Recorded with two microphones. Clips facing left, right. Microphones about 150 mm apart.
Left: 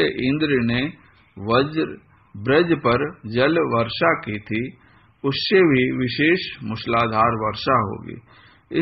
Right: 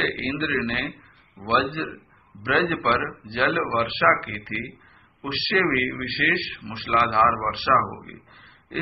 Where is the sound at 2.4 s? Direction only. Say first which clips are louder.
Left 6 dB; 25° left (ahead or behind).